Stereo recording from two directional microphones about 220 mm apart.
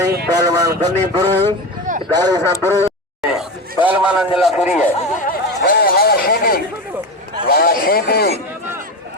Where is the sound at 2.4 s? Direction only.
10° left (ahead or behind).